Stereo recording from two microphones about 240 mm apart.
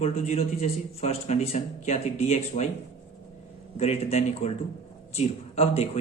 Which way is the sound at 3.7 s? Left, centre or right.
Left.